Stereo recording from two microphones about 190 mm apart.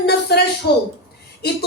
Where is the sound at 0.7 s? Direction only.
55° left (ahead or behind).